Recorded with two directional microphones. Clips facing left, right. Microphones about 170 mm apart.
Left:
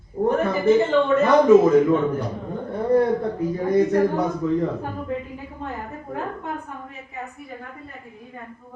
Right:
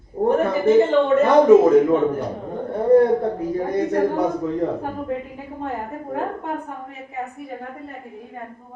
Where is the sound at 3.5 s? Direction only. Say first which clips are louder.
Left 5 dB; 30° right (ahead or behind).